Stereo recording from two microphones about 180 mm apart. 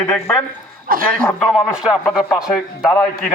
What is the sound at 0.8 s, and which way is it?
Speech, 50° right (ahead or behind).